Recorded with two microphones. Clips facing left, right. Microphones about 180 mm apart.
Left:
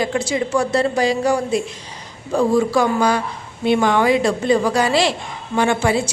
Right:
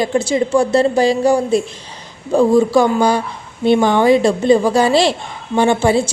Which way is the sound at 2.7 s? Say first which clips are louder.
Right 4 dB; 30° right (ahead or behind).